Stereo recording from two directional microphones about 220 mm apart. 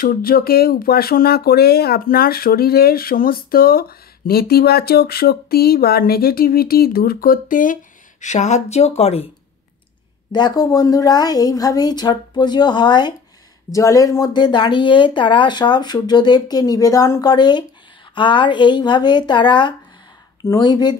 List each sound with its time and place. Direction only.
0.0 s speech: 40° left (ahead or behind)
10.3 s a woman's voice: 20° left (ahead or behind)